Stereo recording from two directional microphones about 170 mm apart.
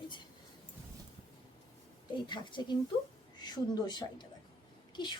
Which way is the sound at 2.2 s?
25° left (ahead or behind).